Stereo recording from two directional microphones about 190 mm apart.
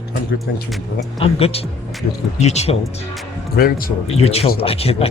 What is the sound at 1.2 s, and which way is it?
Speech, 30° left (ahead or behind).